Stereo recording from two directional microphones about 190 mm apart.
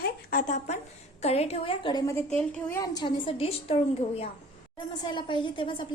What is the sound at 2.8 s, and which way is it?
Speech, 25° left (ahead or behind).